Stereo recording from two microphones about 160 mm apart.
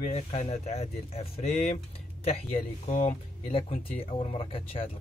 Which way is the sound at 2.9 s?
50° left (ahead or behind).